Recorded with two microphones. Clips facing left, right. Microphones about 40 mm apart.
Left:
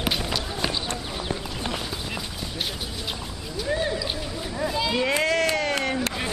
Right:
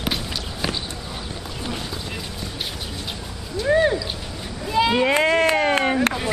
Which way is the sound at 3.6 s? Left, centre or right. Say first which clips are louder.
Right 8 dB; right.